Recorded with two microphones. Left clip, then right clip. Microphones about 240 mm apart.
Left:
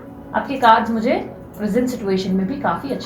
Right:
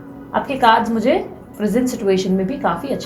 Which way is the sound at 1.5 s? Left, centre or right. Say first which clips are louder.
Right 1 dB; right.